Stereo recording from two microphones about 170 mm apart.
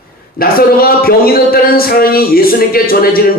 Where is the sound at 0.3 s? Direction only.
60° left (ahead or behind).